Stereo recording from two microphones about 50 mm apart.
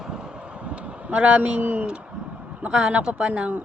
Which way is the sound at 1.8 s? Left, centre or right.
Right.